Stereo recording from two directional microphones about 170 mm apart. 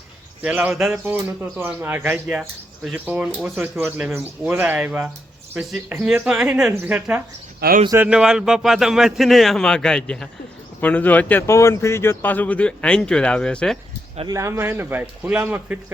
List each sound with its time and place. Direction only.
0.4 s speech: 5° right (ahead or behind)
7.6 s speech: 65° right (ahead or behind)
8.0 s a man's voice: 5° right (ahead or behind)
14.3 s speech: 15° right (ahead or behind)